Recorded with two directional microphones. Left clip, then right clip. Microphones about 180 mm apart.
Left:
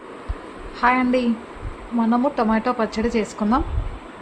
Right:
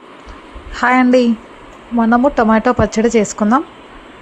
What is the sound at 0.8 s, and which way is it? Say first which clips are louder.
A woman's voice: right 7 dB; 40° right (ahead or behind).